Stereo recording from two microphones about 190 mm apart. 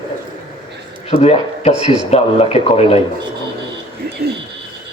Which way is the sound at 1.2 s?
35° left (ahead or behind).